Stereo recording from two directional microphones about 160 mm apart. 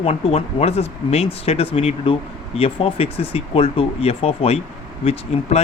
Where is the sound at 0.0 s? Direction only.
40° left (ahead or behind).